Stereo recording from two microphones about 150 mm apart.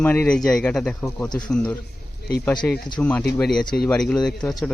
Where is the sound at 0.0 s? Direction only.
10° left (ahead or behind).